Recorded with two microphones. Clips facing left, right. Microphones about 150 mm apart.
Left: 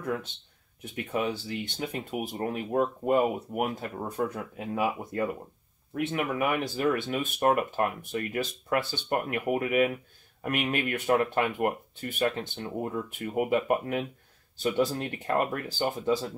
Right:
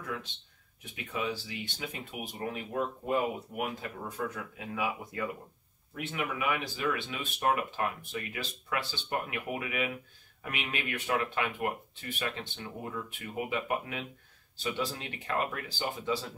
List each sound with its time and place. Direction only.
0.9 s speech: 55° left (ahead or behind)